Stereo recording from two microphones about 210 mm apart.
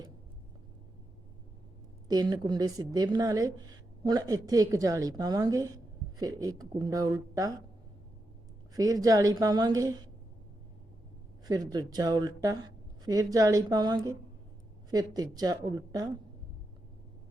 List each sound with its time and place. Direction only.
2.0 s a woman's voice: 20° right (ahead or behind)
8.7 s a woman's voice: 15° right (ahead or behind)
11.4 s a woman's voice: 20° right (ahead or behind)